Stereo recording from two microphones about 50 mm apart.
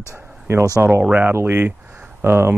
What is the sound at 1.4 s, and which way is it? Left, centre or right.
Speech, right.